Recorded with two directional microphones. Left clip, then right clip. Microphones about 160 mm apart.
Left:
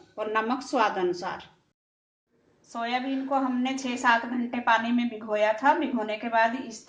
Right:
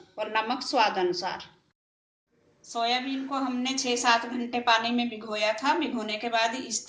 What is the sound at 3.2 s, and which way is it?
A woman's voice, 20° left (ahead or behind).